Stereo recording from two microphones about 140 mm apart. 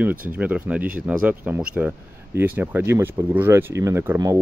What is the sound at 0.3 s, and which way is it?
Speech, 10° right (ahead or behind).